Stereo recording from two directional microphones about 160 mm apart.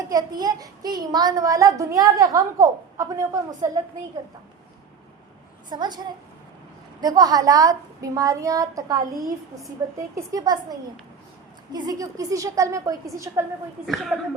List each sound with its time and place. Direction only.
0.1 s a child's voice: 25° right (ahead or behind)
5.6 s a child's voice: 25° right (ahead or behind)
7.0 s a child's voice: 25° right (ahead or behind)
13.8 s speech: centre (ahead or behind)